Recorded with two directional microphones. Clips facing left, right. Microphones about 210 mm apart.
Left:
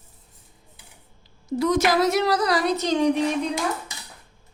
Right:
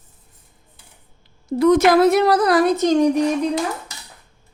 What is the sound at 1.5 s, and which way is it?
A woman's voice, 55° right (ahead or behind).